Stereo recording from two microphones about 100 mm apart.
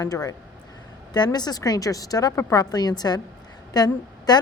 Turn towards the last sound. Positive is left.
turn(degrees=40)  # may be behind; listen again after turning